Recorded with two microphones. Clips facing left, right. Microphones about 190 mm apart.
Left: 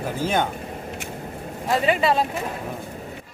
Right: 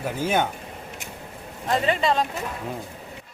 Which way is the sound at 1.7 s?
10° left (ahead or behind).